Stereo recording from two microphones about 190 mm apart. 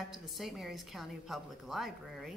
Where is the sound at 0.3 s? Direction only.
Centre (ahead or behind).